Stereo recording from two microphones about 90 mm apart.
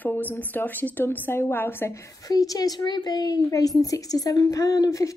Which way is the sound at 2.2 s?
40° left (ahead or behind).